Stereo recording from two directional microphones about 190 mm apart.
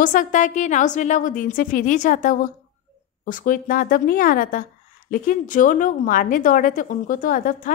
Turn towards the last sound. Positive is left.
turn(degrees=45)  # may be behind; listen again after turning